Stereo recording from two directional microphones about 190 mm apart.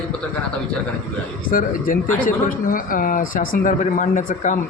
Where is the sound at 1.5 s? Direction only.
45° left (ahead or behind).